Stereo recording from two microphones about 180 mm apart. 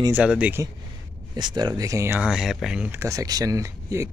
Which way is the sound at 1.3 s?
25° right (ahead or behind).